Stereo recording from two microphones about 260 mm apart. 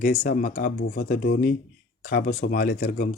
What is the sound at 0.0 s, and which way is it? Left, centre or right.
Speech, left.